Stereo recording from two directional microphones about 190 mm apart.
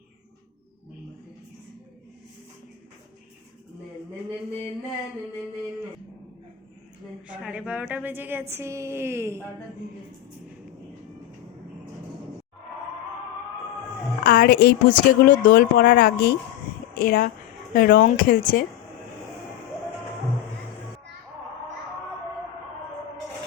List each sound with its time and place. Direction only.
7.3 s a woman's voice: 5° right (ahead or behind)
14.3 s speech: 55° left (ahead or behind)